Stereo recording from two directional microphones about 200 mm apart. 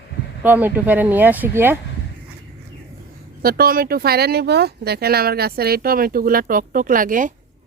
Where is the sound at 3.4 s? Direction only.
50° right (ahead or behind).